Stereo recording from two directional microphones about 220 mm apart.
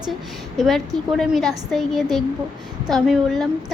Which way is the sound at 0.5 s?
Centre (ahead or behind).